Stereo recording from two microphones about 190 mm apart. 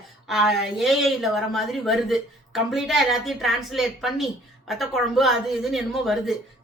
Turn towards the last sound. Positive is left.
turn(degrees=0)  # may be behind; listen again after turning